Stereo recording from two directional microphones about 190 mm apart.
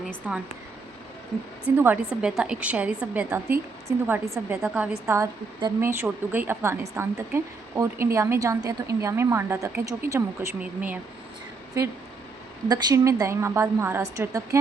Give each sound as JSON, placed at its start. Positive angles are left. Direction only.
{"t": 0.2, "sound": "speech", "side_deg": -5}
{"t": 1.7, "sound": "a woman's voice", "side_deg": -10}